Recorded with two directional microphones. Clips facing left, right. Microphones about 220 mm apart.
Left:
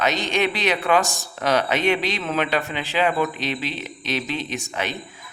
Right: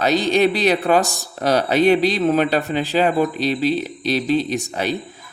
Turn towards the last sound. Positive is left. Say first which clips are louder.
# right 6 dB
turn(degrees=-35)  # may be behind; listen again after turning